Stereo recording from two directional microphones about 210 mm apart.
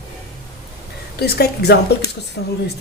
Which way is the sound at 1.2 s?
50° left (ahead or behind).